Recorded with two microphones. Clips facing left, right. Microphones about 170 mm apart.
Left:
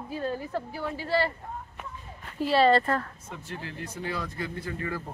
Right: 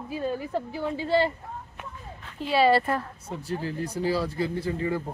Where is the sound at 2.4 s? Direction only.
Centre (ahead or behind).